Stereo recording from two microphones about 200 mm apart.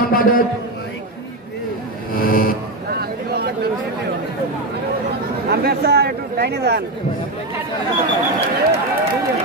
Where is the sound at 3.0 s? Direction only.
55° right (ahead or behind).